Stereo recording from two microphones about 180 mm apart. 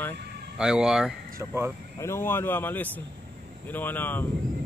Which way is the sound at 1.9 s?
15° left (ahead or behind).